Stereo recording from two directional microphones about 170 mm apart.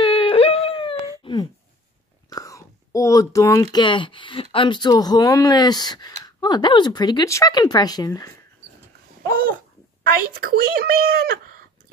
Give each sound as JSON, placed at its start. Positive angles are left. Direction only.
{"t": 0.0, "sound": "a sound", "side_deg": 30}
{"t": 1.2, "sound": "telephone dialing", "side_deg": 25}
{"t": 2.2, "sound": "whispering", "side_deg": 20}
{"t": 3.7, "sound": "speech", "side_deg": 30}
{"t": 10.3, "sound": "speech", "side_deg": -60}